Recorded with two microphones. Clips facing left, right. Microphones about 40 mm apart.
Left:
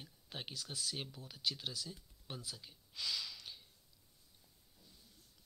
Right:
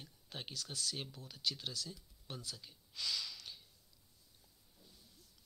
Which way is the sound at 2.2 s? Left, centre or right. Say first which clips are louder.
Even; centre.